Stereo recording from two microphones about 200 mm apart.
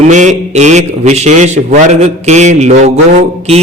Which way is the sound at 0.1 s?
35° right (ahead or behind).